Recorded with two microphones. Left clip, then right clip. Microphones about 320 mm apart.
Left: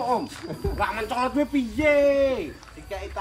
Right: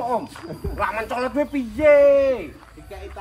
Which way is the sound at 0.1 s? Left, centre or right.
Centre.